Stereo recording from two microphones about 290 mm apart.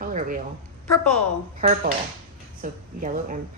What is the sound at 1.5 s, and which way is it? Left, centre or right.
A woman's voice, right.